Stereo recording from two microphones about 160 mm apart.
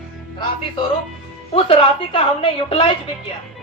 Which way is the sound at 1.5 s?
35° left (ahead or behind).